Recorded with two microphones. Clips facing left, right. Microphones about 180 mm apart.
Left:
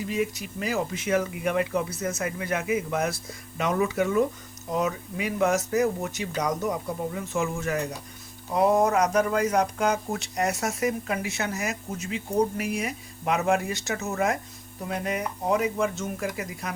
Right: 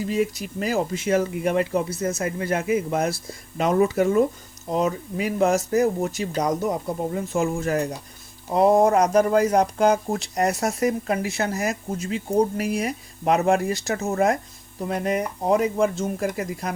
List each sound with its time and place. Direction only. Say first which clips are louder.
0.1 s speech: right 4 dB; 35° right (ahead or behind)